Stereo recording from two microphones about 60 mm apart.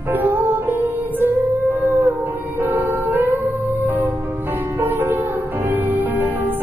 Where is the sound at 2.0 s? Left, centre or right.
Right.